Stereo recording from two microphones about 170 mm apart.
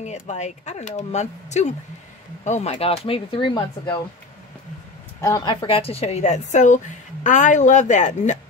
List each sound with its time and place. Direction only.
0.0 s a woman's voice: 45° left (ahead or behind); by 4.0 s 25° left (ahead or behind)
5.2 s a woman's voice: 20° left (ahead or behind); by 8.4 s 45° left (ahead or behind)